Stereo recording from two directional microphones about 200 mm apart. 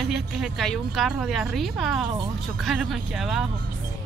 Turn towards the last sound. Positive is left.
turn(degrees=0)  # may be behind; listen again after turning